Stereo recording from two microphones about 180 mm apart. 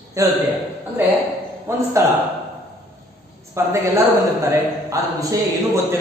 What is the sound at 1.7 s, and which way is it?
Speech, 15° right (ahead or behind).